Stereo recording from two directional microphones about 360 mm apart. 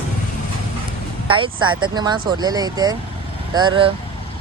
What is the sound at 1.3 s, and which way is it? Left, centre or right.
Speech, centre.